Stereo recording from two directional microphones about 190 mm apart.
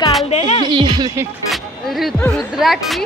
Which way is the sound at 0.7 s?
25° right (ahead or behind).